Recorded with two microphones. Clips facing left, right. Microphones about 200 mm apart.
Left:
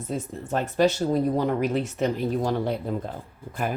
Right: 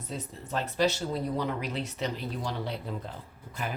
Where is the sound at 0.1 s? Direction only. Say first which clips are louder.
Left 6 dB; 50° left (ahead or behind).